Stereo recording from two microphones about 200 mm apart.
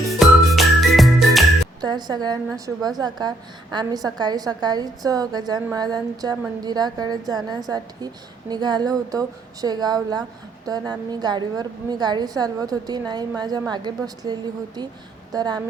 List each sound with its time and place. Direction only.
0.1 s music: centre (ahead or behind)
1.8 s a woman's voice: 20° right (ahead or behind)